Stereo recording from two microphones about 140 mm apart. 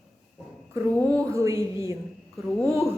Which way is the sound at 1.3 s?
25° right (ahead or behind).